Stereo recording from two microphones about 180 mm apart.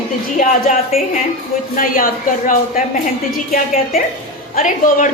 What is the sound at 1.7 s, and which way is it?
A woman's voice, 50° left (ahead or behind).